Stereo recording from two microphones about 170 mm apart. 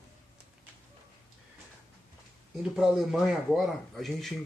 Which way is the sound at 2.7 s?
Centre (ahead or behind).